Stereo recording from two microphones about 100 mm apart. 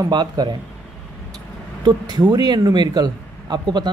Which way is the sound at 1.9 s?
45° right (ahead or behind).